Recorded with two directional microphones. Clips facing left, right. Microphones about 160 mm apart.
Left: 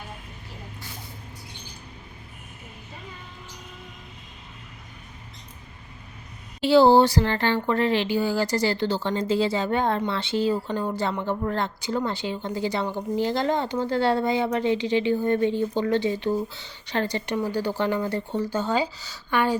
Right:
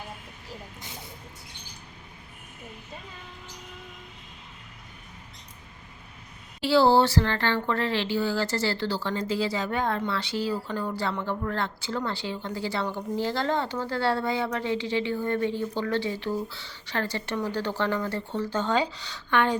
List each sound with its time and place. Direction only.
6.6 s speech: 20° left (ahead or behind)